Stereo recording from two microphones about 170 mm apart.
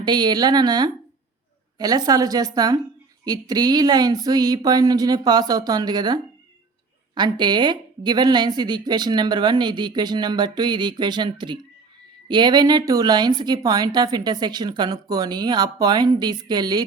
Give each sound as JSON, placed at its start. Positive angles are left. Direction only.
{"t": 0.0, "sound": "a woman's voice", "side_deg": -25}